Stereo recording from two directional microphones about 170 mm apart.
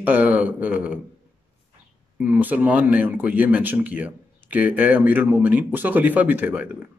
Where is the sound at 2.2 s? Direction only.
10° right (ahead or behind).